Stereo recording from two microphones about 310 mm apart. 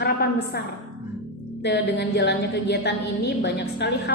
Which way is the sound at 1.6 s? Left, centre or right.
Left.